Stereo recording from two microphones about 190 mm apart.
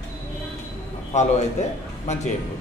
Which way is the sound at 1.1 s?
35° left (ahead or behind).